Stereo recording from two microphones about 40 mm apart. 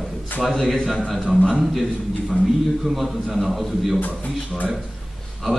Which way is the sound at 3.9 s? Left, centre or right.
Left.